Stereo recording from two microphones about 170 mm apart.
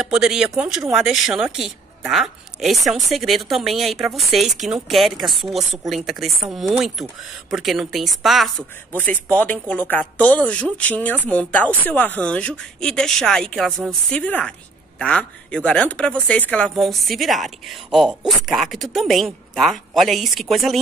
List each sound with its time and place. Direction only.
0.0 s speech: 5° right (ahead or behind)